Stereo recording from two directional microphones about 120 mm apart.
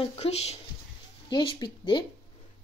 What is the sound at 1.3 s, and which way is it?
Speech, 40° left (ahead or behind).